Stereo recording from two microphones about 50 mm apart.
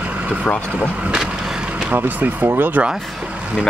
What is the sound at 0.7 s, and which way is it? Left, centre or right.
Speech, right.